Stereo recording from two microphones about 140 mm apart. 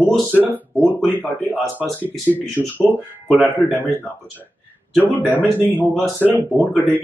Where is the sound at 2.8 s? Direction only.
15° right (ahead or behind).